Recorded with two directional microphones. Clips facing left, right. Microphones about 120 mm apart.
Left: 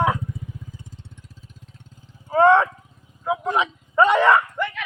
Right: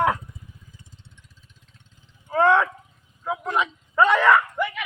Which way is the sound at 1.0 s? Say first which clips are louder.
Left 8 dB; 45° left (ahead or behind).